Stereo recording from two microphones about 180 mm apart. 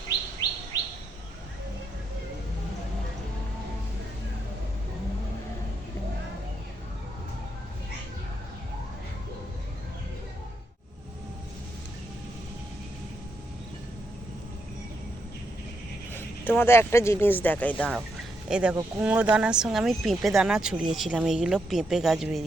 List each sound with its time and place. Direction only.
16.1 s speech: 10° left (ahead or behind)
18.4 s speech: 5° right (ahead or behind)